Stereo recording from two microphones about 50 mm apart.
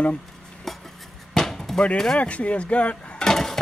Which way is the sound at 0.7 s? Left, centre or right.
Centre.